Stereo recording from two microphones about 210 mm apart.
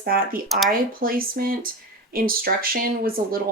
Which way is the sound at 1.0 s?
45° right (ahead or behind).